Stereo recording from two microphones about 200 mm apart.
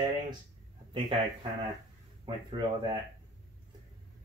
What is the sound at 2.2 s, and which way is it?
Speech, 20° right (ahead or behind).